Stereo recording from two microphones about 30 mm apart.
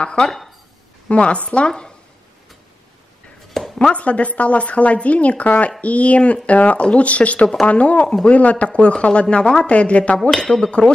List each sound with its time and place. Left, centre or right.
0.0 s speech: left
1.7 s speech: left
3.6 s a sound: centre
3.9 s speech: left
6.8 s speech: left
7.1 s speech: left
10.3 s speech: left